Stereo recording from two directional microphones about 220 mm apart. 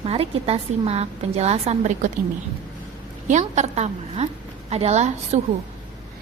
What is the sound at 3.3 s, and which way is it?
A woman's voice, 30° right (ahead or behind).